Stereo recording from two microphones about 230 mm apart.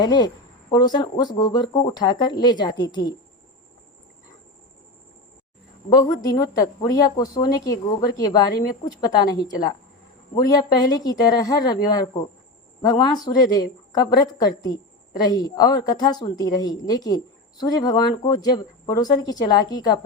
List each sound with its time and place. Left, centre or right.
0.0 s speech: centre
5.9 s speech: centre